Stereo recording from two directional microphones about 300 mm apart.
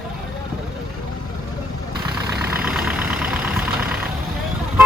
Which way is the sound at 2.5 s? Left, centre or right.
Centre.